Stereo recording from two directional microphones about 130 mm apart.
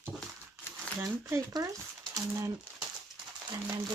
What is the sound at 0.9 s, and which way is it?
Speech, 20° right (ahead or behind).